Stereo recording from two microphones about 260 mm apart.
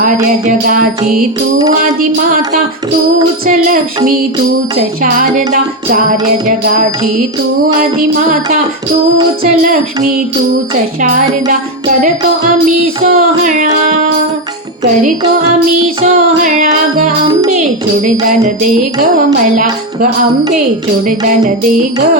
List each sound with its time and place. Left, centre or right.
0.4 s music: right
5.0 s music: right
11.0 s music: right
13.1 s music: right
16.0 s music: right